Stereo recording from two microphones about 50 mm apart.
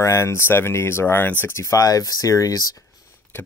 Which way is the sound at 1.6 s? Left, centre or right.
Left.